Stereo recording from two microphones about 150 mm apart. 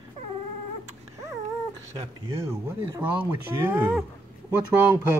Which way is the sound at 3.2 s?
10° right (ahead or behind).